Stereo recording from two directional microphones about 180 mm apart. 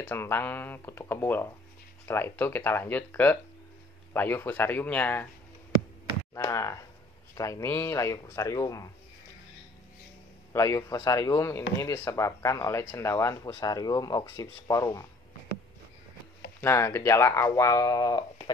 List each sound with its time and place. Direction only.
0.0 s speech: 10° left (ahead or behind)
6.3 s speech: 15° left (ahead or behind)
10.5 s speech: 15° left (ahead or behind)
16.6 s speech: 15° left (ahead or behind)